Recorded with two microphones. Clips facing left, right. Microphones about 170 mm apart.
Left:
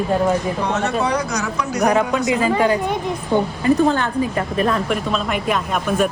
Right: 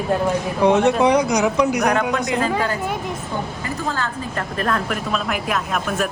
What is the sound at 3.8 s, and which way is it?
Speech, 20° left (ahead or behind).